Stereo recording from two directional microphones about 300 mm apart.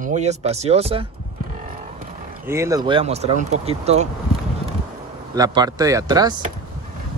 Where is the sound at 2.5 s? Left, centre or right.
Centre.